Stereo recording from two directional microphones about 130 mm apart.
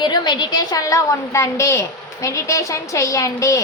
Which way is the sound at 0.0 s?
35° left (ahead or behind).